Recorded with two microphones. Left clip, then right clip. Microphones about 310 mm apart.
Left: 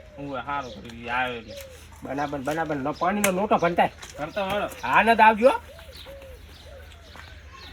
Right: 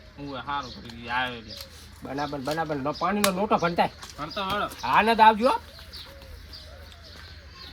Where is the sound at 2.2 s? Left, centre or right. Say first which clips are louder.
Left 1 dB; centre.